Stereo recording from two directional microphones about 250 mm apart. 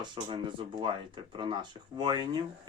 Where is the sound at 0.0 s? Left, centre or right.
Centre.